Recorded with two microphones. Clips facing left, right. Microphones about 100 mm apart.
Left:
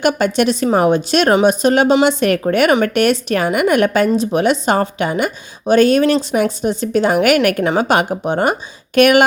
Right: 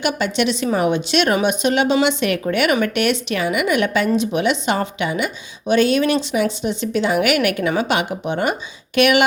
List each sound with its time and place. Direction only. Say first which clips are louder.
0.0 s a woman's voice: left 5 dB; 45° left (ahead or behind)